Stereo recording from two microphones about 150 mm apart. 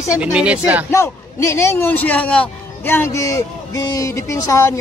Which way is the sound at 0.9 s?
20° left (ahead or behind).